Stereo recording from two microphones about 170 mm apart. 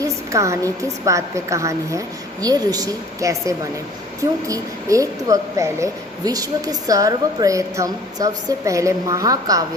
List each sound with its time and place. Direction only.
0.0 s a woman's voice: 15° right (ahead or behind)